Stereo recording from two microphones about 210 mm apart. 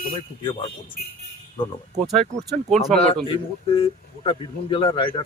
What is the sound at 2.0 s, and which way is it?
Speech, centre (ahead or behind).